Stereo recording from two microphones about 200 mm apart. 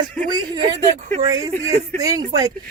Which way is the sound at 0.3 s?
20° right (ahead or behind).